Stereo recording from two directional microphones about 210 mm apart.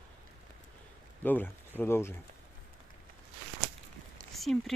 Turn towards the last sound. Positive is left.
turn(degrees=0)  # may be behind; listen again after turning